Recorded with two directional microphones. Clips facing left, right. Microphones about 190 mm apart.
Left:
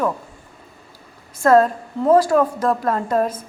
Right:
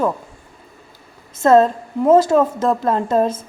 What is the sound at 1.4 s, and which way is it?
A woman's voice, 25° right (ahead or behind).